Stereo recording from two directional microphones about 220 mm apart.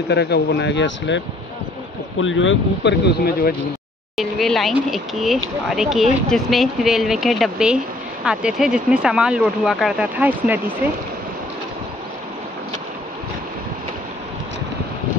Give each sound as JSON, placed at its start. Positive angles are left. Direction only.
{"t": 0.1, "sound": "speech", "side_deg": 50}
{"t": 4.2, "sound": "speech", "side_deg": 0}